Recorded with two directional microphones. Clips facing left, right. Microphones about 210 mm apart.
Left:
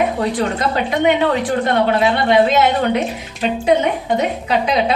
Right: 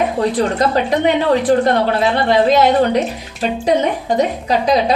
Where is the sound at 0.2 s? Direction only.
40° right (ahead or behind).